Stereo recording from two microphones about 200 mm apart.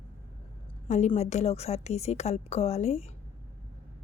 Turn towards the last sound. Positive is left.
turn(degrees=30)  # may be behind; listen again after turning